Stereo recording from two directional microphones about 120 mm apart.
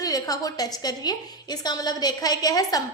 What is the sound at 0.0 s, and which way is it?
A woman's voice, 30° left (ahead or behind).